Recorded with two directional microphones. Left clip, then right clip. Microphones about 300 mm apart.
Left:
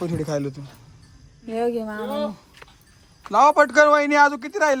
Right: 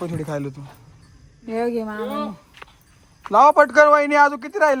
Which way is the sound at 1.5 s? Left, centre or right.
Centre.